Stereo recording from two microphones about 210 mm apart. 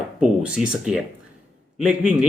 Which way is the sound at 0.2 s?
5° right (ahead or behind).